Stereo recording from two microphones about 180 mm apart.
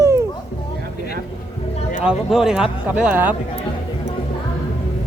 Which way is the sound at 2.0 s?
5° right (ahead or behind).